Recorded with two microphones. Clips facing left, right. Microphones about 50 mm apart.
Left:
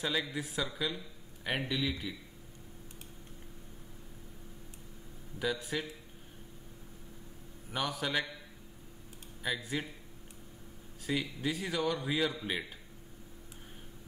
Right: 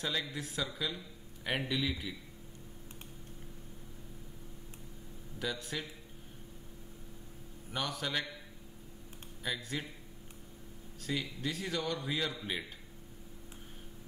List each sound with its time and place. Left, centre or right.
0.0 s speech: centre
5.4 s a man's voice: centre
7.7 s speech: centre
9.4 s a man's voice: centre
11.0 s a man's voice: centre